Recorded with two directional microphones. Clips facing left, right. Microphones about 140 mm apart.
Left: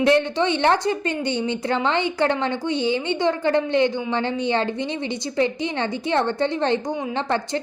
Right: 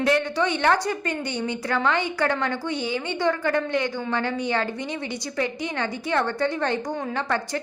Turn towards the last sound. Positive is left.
turn(degrees=25)  # may be behind; listen again after turning